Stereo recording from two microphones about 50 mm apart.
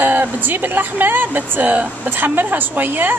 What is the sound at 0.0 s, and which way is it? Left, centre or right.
Speech, right.